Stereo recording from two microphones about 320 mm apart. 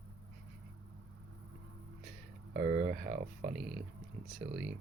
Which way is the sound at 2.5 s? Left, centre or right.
Right.